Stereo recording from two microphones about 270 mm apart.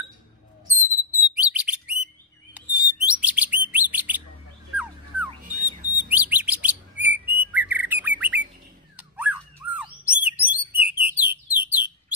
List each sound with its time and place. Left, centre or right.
0.7 s bird: centre
5.5 s a sound: right
6.0 s chirp: centre
7.3 s bird: centre
8.9 s dog: centre
10.2 s bird: centre